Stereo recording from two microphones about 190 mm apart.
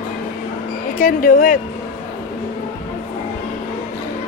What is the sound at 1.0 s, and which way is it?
Speech, 45° left (ahead or behind).